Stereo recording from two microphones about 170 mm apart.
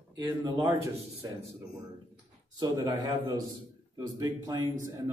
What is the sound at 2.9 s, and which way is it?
A man's voice, 25° right (ahead or behind).